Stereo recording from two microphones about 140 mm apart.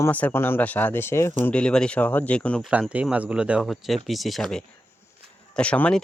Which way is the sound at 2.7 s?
10° right (ahead or behind).